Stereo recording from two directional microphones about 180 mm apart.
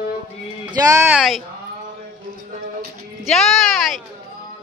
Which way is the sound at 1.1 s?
Centre (ahead or behind).